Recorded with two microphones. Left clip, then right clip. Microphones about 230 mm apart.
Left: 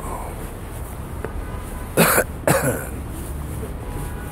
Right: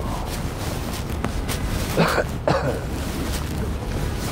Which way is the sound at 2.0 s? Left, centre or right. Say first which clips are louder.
Left 4 dB; left.